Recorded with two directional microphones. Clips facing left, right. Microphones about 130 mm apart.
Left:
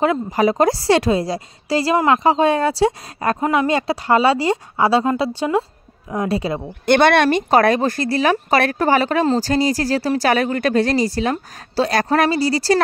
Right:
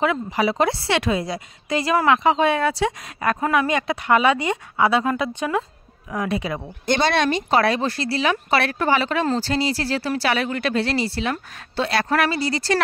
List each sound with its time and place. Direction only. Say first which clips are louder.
0.0 s speech: left 4 dB; 40° left (ahead or behind)
6.9 s speech: left 6 dB; 60° left (ahead or behind); by 12.8 s 35° left (ahead or behind)